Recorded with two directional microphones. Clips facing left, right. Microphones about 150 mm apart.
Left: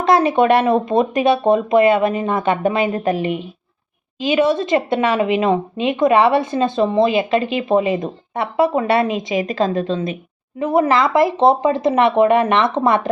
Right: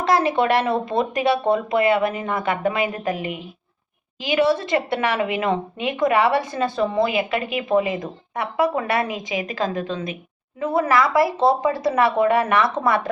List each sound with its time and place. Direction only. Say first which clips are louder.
0.0 s speech: left 5 dB; 20° left (ahead or behind)